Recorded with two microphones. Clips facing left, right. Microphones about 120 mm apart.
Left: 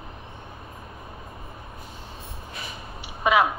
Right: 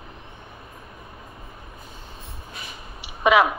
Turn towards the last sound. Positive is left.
turn(degrees=-90)